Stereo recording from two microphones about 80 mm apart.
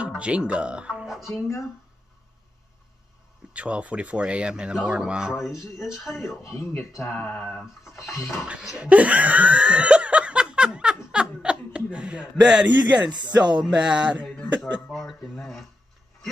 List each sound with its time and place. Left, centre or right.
0.2 s speech: centre
3.5 s speech: centre
5.5 s speech: left
7.2 s a sound: centre
7.6 s a sound: centre
8.1 s speech: left
8.5 s laughter: centre
13.4 s speech: centre
14.9 s speech: centre